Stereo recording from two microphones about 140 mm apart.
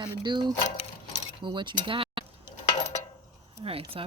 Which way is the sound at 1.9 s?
40° right (ahead or behind).